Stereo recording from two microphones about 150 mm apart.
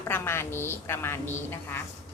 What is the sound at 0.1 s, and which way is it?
Speech, 15° left (ahead or behind).